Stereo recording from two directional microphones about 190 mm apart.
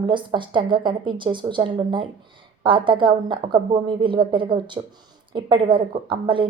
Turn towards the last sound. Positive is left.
turn(degrees=-25)  # may be behind; listen again after turning